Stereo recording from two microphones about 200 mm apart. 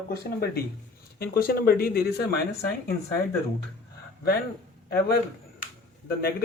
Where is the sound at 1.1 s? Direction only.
50° left (ahead or behind).